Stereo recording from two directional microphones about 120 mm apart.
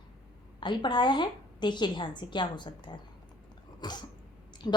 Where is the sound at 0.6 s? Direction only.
40° left (ahead or behind).